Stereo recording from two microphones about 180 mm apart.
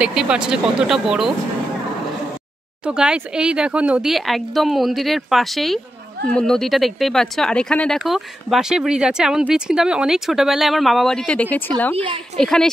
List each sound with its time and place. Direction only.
0.0 s speech: 5° right (ahead or behind)
2.8 s speech: 5° right (ahead or behind)